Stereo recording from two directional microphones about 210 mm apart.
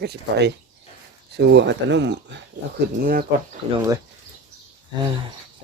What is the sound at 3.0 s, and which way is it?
Speech, 45° right (ahead or behind).